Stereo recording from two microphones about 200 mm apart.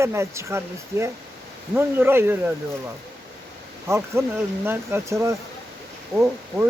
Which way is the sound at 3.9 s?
15° right (ahead or behind).